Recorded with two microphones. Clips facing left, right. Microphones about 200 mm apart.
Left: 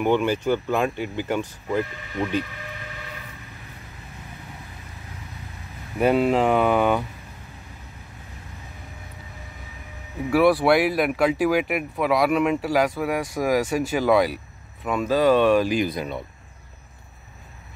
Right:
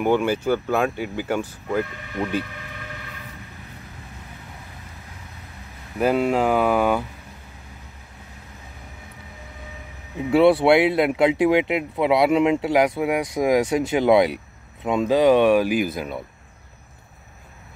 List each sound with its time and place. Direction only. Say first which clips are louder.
0.0 s speech: right 1 dB; 10° right (ahead or behind)
5.9 s speech: left 1 dB; centre (ahead or behind)
10.3 s speech: right 3 dB; 25° right (ahead or behind); by 16.2 s 5° right (ahead or behind)